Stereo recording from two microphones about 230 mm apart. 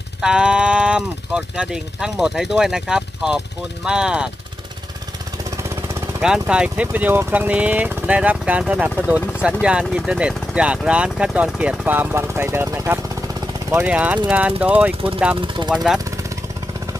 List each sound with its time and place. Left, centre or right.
0.2 s speech: centre
5.6 s speech: centre
15.4 s speech: centre
15.7 s speech: centre